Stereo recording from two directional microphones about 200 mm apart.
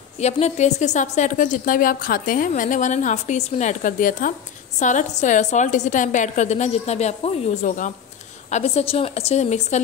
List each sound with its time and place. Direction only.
0.2 s a woman's voice: 35° left (ahead or behind)